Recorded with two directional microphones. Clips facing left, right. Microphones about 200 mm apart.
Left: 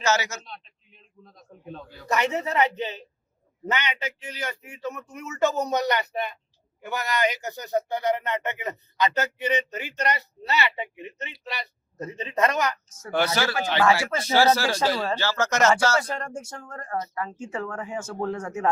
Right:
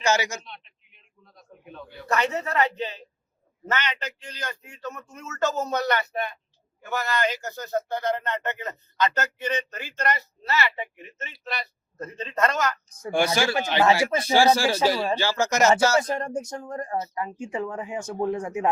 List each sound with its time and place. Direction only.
0.0 s speech: 15° right (ahead or behind)
0.4 s a man's voice: 35° left (ahead or behind)
2.0 s speech: 15° left (ahead or behind)
13.0 s speech: 15° right (ahead or behind)